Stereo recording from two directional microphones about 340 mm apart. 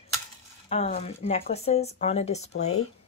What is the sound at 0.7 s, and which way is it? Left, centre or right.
Speech, centre.